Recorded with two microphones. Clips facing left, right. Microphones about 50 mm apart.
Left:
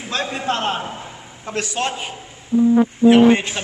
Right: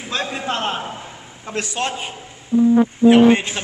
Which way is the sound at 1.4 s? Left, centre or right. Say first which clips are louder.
Left 1 dB; centre.